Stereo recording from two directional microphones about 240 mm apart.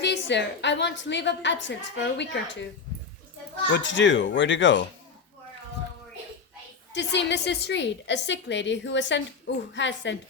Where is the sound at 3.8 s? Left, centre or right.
Left.